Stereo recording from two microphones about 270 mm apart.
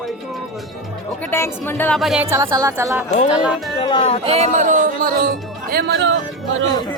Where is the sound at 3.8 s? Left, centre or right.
Centre.